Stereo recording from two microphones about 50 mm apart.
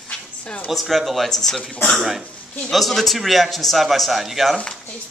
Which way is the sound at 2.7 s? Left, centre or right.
Centre.